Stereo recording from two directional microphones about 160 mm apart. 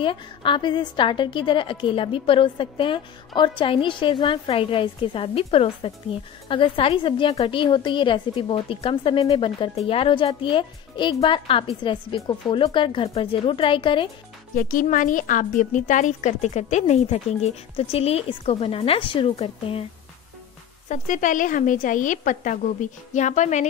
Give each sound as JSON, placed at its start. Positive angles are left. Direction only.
{"t": 0.0, "sound": "a woman's voice", "side_deg": 30}
{"t": 14.5, "sound": "a woman's voice", "side_deg": 60}
{"t": 20.9, "sound": "a woman's voice", "side_deg": 50}